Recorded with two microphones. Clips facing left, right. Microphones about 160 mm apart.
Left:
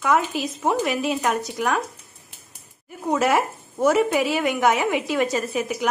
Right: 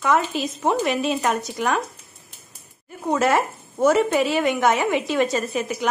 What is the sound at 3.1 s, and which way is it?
A woman's voice, 10° left (ahead or behind).